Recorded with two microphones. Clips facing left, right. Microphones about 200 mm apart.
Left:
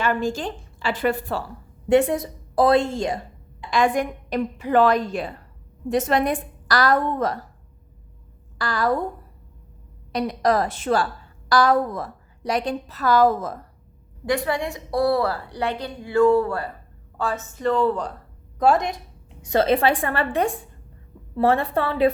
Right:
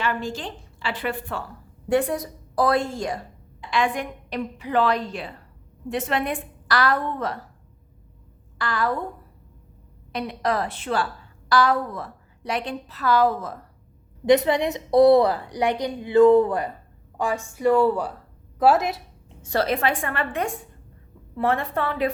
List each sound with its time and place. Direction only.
0.0 s a woman's voice: 45° left (ahead or behind)
1.9 s a woman's voice: 25° left (ahead or behind)
3.7 s a woman's voice: 45° left (ahead or behind)
8.5 s a woman's voice: 40° left (ahead or behind)
10.1 s a woman's voice: 40° left (ahead or behind)
14.3 s a woman's voice: 20° right (ahead or behind); by 19.0 s 5° right (ahead or behind)
19.4 s a woman's voice: 20° left (ahead or behind)